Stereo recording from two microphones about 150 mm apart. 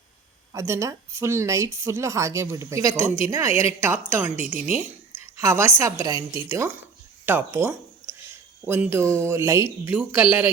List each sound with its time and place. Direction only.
0.5 s speech: 20° right (ahead or behind)